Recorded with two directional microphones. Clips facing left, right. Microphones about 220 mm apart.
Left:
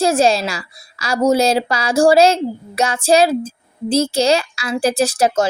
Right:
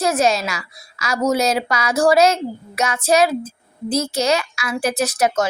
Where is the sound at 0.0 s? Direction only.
30° left (ahead or behind).